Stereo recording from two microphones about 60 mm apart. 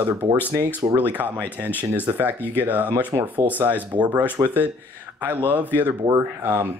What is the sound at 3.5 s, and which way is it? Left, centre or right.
Speech, right.